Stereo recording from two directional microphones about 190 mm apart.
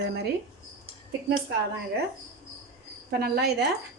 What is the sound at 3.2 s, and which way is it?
Speech, 55° right (ahead or behind).